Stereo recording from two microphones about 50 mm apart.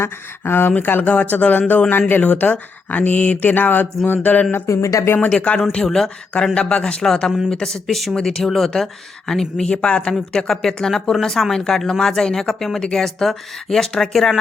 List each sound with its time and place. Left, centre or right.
0.0 s speech: left
1.0 s speech: left
4.7 s speech: left
5.0 s speech: left
5.7 s speech: centre
6.3 s speech: left
7.0 s speech: centre
9.7 s speech: centre